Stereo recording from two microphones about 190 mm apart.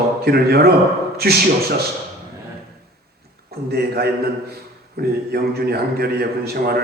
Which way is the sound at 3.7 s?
55° right (ahead or behind).